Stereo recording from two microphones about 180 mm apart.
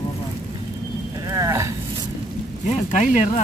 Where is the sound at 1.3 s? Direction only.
20° right (ahead or behind).